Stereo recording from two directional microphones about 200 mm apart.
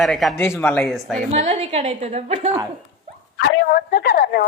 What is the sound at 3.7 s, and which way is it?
Speech, 50° left (ahead or behind).